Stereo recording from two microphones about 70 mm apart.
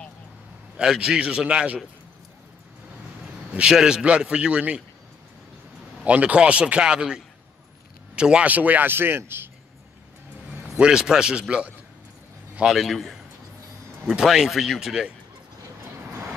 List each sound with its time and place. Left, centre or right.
0.7 s a man's voice: centre
3.5 s a man's voice: centre
6.0 s a man's voice: centre
10.5 s a man's voice: centre
12.6 s speech: centre
16.1 s vehicle: right